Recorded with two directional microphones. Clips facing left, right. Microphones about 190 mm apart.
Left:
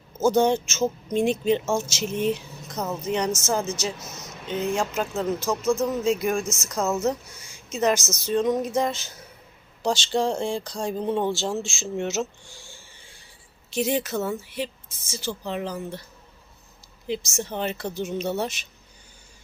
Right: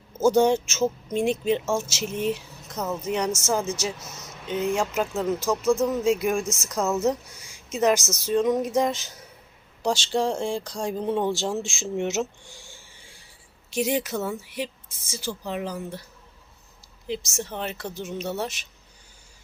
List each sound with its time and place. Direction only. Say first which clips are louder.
0.2 s speech: right 1 dB; 10° right (ahead or behind)
2.7 s speech: even; 10° left (ahead or behind)
3.1 s speech: left 1 dB; 5° right (ahead or behind)
6.7 s speech: even; centre (ahead or behind)
7.0 s speech: right 1 dB; 15° right (ahead or behind)
12.5 s a sound: even; 15° right (ahead or behind)
13.7 s speech: even; 10° right (ahead or behind)
17.1 s speech: left 2 dB; centre (ahead or behind)